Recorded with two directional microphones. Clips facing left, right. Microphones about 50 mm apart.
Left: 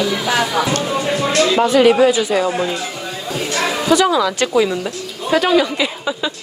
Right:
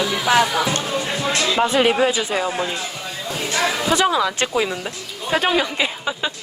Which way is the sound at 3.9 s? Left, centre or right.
Right.